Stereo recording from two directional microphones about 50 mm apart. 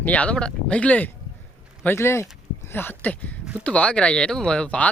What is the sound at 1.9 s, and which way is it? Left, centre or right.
Speech, left.